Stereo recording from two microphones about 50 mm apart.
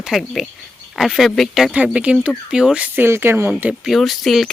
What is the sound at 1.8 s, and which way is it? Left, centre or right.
Speech, right.